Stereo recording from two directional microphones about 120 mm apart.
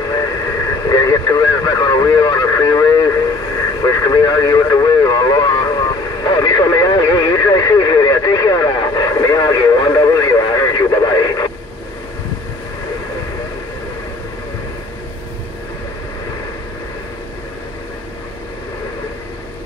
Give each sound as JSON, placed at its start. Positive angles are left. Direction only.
{"t": 0.9, "sound": "radio", "side_deg": 30}
{"t": 3.8, "sound": "vehicle", "side_deg": 30}